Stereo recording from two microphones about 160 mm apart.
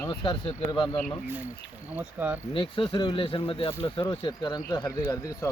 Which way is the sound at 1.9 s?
10° right (ahead or behind).